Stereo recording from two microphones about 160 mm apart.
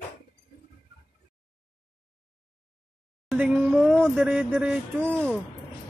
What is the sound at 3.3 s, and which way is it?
Speech, 10° right (ahead or behind).